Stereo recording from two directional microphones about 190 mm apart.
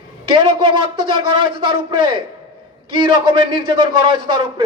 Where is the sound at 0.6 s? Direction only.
25° right (ahead or behind).